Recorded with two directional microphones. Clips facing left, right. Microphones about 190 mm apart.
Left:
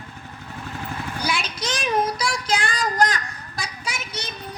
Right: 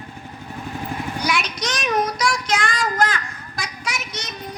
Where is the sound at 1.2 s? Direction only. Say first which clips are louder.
Right 2 dB; 30° left (ahead or behind).